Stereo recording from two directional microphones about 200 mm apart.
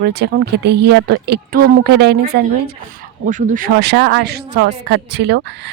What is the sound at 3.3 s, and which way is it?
Speech, 40° right (ahead or behind).